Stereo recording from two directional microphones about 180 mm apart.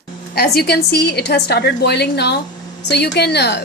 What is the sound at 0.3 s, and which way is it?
A woman's voice, 60° left (ahead or behind).